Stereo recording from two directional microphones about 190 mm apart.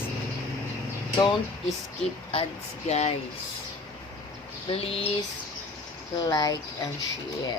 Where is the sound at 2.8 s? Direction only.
35° left (ahead or behind).